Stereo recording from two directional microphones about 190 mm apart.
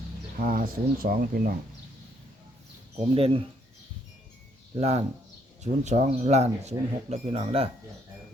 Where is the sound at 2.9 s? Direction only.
30° right (ahead or behind).